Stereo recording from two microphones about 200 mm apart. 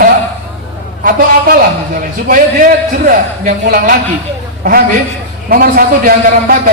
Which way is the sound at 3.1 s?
45° right (ahead or behind).